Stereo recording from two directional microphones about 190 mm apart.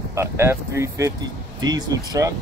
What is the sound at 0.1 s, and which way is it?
Speech, 15° right (ahead or behind).